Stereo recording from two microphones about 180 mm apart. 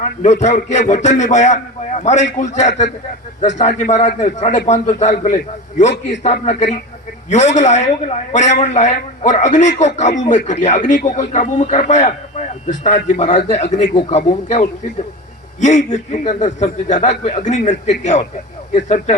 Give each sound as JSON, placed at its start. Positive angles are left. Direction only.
{"t": 0.0, "sound": "a man's voice", "side_deg": 45}
{"t": 6.4, "sound": "a man's voice", "side_deg": 40}